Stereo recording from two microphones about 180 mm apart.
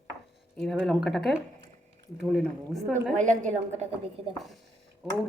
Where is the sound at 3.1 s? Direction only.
45° right (ahead or behind).